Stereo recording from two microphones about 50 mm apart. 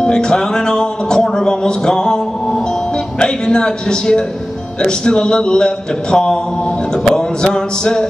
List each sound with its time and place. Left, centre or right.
0.0 s speech: centre
3.2 s speech: centre
4.8 s music: centre